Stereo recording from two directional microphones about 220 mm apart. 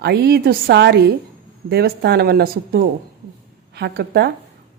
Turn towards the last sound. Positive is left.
turn(degrees=-45)  # may be behind; listen again after turning